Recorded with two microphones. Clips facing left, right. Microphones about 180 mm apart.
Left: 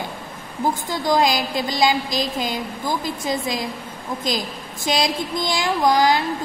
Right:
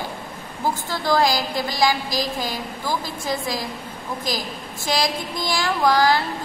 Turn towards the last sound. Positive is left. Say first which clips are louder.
# left 1 dB
turn(degrees=20)  # may be behind; listen again after turning